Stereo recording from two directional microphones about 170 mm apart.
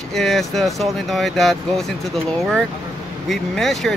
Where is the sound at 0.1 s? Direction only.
Centre (ahead or behind).